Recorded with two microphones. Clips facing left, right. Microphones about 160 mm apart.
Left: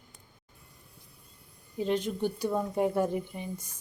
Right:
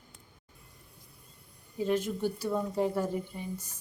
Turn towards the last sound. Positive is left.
turn(degrees=15)  # may be behind; listen again after turning